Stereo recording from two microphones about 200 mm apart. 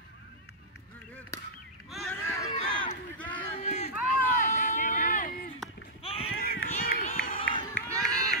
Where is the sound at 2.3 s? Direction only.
35° left (ahead or behind).